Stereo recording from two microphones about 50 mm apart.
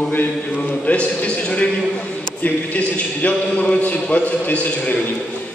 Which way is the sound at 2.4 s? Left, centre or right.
Left.